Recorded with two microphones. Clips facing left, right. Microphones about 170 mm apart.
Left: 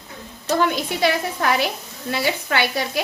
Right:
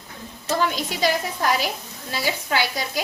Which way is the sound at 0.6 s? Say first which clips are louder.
Left 3 dB; 60° left (ahead or behind).